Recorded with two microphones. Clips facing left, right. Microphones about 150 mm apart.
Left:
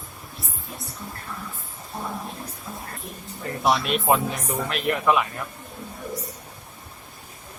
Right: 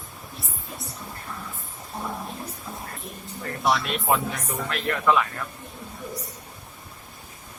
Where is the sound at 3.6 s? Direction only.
20° left (ahead or behind).